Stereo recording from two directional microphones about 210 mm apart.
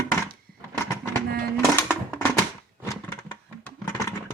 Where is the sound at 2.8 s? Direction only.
15° left (ahead or behind).